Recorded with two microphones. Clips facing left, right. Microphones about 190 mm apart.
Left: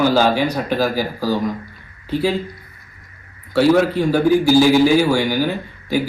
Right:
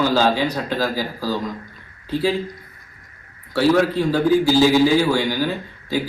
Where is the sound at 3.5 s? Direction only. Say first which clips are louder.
Left 3 dB; 20° left (ahead or behind).